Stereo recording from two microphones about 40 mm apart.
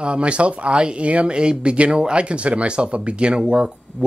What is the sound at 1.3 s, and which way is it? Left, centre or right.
Speech, right.